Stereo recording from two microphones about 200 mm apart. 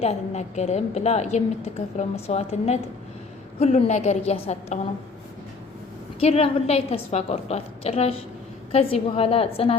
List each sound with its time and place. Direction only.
0.0 s a woman's voice: 35° left (ahead or behind)
6.1 s a woman's voice: 30° left (ahead or behind)